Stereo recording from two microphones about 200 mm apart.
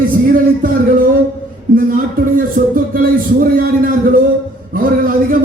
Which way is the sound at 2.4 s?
45° right (ahead or behind).